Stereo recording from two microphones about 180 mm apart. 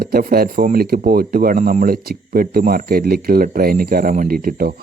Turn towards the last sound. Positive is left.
turn(degrees=-55)  # may be behind; listen again after turning